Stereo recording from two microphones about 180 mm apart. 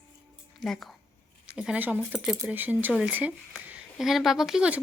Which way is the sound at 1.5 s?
5° right (ahead or behind).